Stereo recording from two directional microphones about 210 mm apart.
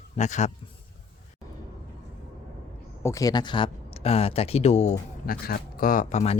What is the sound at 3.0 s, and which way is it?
Speech, 15° left (ahead or behind).